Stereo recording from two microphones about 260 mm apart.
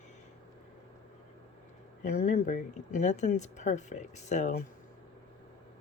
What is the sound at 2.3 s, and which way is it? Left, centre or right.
Speech, left.